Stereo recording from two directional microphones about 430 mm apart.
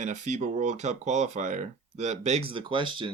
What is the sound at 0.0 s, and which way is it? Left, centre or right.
Speech, centre.